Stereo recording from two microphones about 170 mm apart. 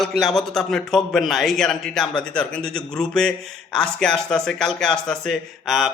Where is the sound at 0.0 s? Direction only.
Centre (ahead or behind).